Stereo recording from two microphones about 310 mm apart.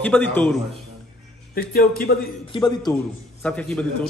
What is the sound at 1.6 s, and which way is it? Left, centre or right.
Speech, left.